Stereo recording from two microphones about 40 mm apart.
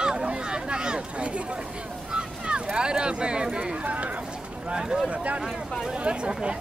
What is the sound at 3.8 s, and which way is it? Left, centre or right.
Speech, right.